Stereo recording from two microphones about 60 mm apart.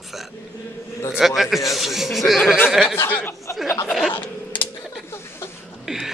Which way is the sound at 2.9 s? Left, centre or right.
Left.